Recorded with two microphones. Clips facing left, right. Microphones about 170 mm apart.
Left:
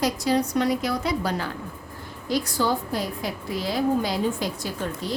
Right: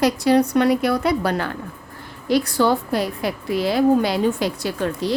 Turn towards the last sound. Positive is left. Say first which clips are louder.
# right 7 dB
turn(degrees=-80)